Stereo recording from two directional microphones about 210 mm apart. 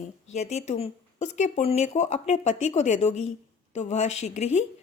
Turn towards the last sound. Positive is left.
turn(degrees=30)  # may be behind; listen again after turning